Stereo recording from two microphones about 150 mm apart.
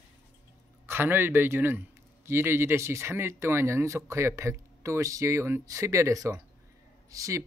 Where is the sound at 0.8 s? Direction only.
15° right (ahead or behind).